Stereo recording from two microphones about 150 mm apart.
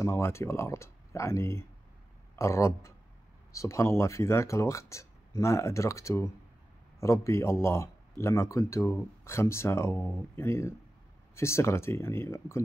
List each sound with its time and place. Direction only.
0.0 s speech: 15° left (ahead or behind)